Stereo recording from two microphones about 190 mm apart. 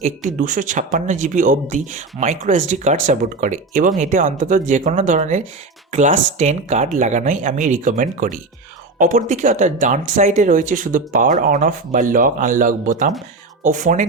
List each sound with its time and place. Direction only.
0.0 s speech: 40° right (ahead or behind)